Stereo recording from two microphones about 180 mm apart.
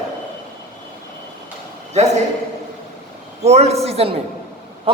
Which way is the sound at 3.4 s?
35° right (ahead or behind).